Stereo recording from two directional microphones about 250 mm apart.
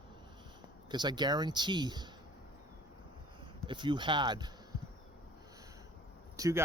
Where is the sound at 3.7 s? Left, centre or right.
Centre.